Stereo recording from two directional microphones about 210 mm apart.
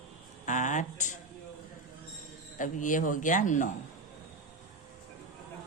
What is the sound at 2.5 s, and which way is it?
Speech, 40° left (ahead or behind).